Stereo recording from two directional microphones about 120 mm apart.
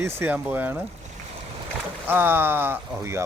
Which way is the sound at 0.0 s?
20° right (ahead or behind).